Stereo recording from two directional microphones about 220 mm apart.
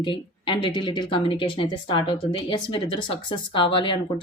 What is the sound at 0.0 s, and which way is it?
Speech, 25° left (ahead or behind).